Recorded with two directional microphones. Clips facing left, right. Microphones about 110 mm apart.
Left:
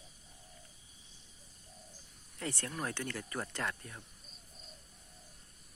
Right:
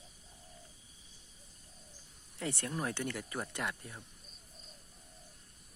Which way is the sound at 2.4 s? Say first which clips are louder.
Right 1 dB; 20° right (ahead or behind).